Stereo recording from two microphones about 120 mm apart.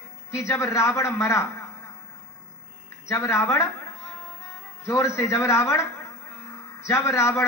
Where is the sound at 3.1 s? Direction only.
25° left (ahead or behind).